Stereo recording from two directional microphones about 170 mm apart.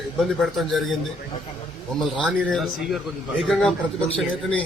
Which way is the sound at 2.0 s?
5° left (ahead or behind).